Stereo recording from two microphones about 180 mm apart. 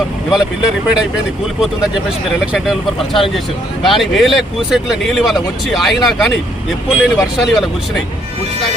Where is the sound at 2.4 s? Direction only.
Centre (ahead or behind).